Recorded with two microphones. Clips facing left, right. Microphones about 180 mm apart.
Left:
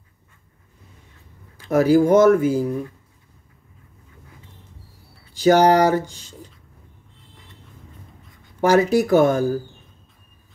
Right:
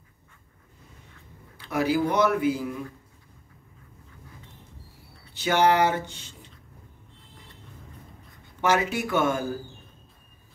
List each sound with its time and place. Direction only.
1.6 s speech: 45° left (ahead or behind)
5.3 s speech: 40° left (ahead or behind)
8.5 s speech: 40° left (ahead or behind)